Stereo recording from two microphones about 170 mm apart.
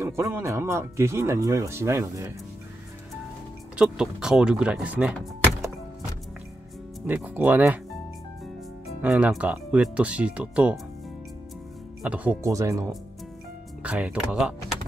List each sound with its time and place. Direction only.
0.0 s speech: 20° right (ahead or behind)
3.7 s speech: 5° right (ahead or behind)
7.1 s speech: 10° right (ahead or behind)
8.8 s speech: 5° right (ahead or behind)
12.0 s speech: 10° right (ahead or behind)
12.4 s speech: 20° right (ahead or behind)
13.8 s speech: 5° right (ahead or behind)